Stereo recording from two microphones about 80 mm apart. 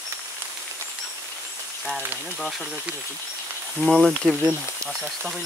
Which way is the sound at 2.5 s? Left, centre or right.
Centre.